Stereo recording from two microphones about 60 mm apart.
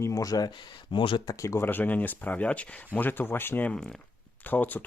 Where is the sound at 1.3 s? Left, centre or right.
Left.